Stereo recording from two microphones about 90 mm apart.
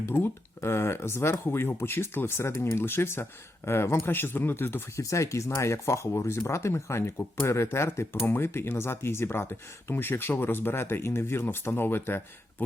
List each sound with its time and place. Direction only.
0.0 s speech: 25° left (ahead or behind)